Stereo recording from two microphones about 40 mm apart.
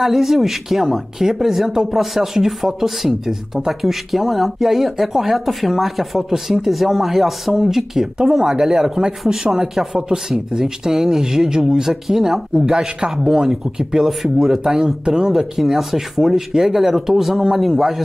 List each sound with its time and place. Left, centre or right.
0.0 s speech: centre
14.6 s speech: centre